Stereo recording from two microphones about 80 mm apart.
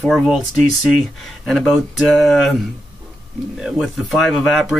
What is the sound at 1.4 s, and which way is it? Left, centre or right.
Speech, centre.